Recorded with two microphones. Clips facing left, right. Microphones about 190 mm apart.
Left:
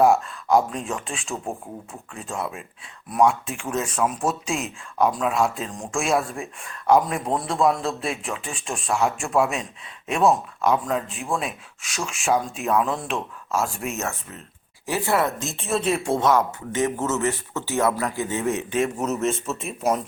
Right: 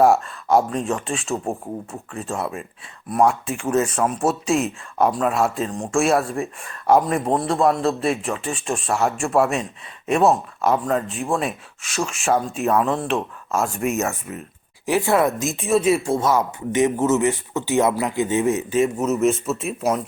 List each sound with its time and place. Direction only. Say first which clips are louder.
0.0 s a man's voice: right 2 dB; centre (ahead or behind)
16.7 s speech: right 6 dB; 15° right (ahead or behind)
18.5 s a man's voice: right 4 dB; 5° right (ahead or behind)